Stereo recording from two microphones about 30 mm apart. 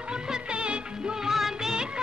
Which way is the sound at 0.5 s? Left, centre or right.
Right.